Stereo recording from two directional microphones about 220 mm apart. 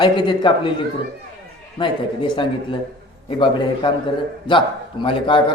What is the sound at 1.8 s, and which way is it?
Speech, 20° left (ahead or behind).